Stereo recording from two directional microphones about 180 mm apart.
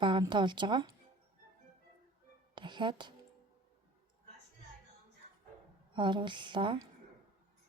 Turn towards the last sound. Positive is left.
turn(degrees=-25)  # may be behind; listen again after turning